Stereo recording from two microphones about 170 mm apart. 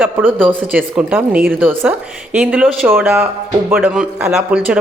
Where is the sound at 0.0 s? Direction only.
10° right (ahead or behind).